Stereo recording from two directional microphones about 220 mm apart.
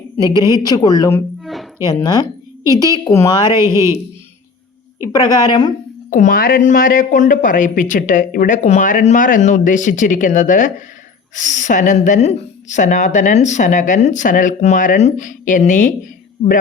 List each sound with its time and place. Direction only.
0.4 s speech: 15° left (ahead or behind)
1.4 s a sound: centre (ahead or behind)
1.9 s speech: 15° left (ahead or behind)
3.5 s speech: 15° right (ahead or behind)
5.0 s a woman's voice: 20° left (ahead or behind)
6.1 s speech: 35° left (ahead or behind)